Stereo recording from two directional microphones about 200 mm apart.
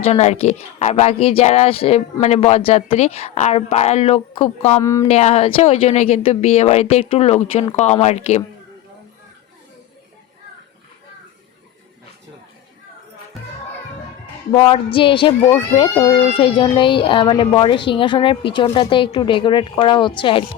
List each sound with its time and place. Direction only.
0.1 s speech: 35° left (ahead or behind)
4.8 s speech: 15° left (ahead or behind)
5.0 s speech: 30° left (ahead or behind)
14.7 s speech: 25° left (ahead or behind)